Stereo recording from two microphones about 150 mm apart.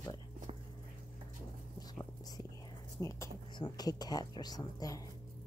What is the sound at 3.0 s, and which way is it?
Speech, 20° left (ahead or behind).